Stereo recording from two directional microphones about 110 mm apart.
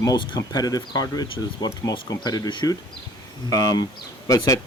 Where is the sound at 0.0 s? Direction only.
35° left (ahead or behind).